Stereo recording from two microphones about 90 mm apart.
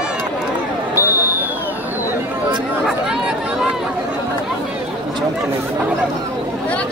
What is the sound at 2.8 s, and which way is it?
Chatter, 5° right (ahead or behind).